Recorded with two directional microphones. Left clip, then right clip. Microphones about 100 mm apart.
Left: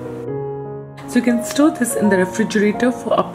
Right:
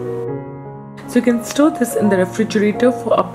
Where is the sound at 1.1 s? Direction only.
5° right (ahead or behind).